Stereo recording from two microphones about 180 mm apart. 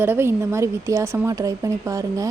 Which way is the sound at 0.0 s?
15° right (ahead or behind).